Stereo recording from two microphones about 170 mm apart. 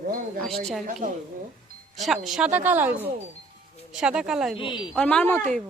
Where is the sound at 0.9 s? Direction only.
50° right (ahead or behind).